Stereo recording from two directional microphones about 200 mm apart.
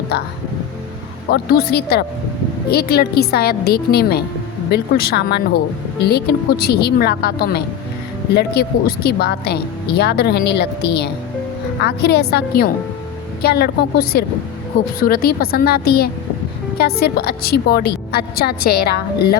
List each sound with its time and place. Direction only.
0.1 s a woman's voice: 55° left (ahead or behind)
1.3 s a woman's voice: 50° left (ahead or behind)